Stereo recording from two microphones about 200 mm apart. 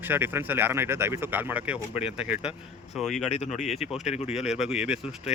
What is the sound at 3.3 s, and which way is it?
Speech, 30° left (ahead or behind).